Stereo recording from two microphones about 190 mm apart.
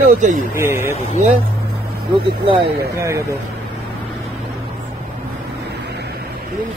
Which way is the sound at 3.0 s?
15° right (ahead or behind).